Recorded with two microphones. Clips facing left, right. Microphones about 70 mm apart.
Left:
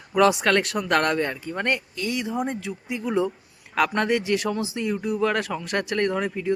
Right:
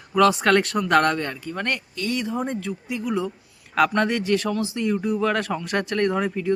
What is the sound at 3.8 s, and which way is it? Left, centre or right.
Speech, centre.